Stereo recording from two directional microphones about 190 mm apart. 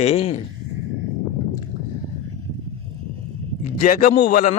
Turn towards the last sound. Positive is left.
turn(degrees=45)  # may be behind; listen again after turning